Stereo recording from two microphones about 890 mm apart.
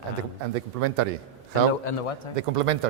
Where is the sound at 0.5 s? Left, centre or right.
Right.